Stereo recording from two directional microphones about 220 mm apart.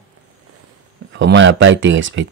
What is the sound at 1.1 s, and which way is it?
Speech, 55° right (ahead or behind).